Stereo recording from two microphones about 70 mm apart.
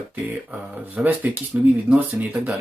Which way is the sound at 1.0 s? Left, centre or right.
Right.